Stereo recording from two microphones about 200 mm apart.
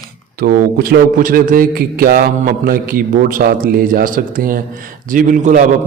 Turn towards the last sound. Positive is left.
turn(degrees=-40)  # may be behind; listen again after turning